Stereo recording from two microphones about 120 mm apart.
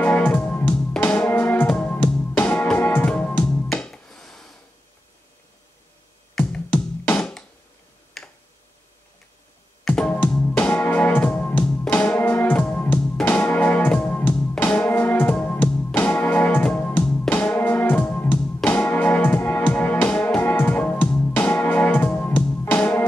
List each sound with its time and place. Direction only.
0.0 s music: 15° left (ahead or behind)
6.3 s music: 10° left (ahead or behind)
8.2 s tick-tock: centre (ahead or behind)
9.8 s music: 10° left (ahead or behind)